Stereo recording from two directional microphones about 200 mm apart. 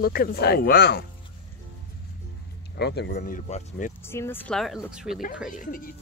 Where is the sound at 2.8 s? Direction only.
55° left (ahead or behind); by 3.9 s 40° left (ahead or behind).